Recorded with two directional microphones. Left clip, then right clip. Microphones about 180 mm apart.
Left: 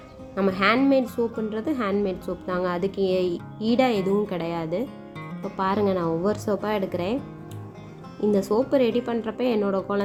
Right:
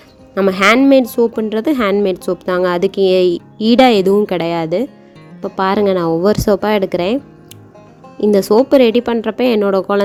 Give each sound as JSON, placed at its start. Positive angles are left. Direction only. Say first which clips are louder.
{"t": 0.3, "sound": "a woman's voice", "louder": "right 10 dB", "side_deg": -55}
{"t": 8.2, "sound": "a woman's voice", "louder": "right 11 dB", "side_deg": -50}